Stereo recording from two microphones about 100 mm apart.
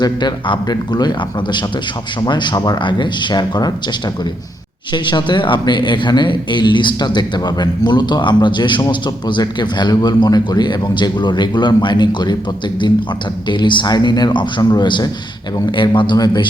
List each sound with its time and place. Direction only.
0.0 s speech: 45° left (ahead or behind)
4.9 s speech: 50° left (ahead or behind)